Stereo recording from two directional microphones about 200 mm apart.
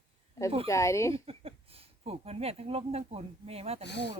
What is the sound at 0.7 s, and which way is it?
Speech, 15° left (ahead or behind).